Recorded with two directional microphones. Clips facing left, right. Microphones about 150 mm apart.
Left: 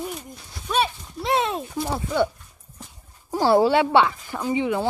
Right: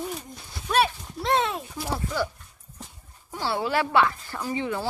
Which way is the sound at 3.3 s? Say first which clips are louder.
Left 11 dB; 40° left (ahead or behind).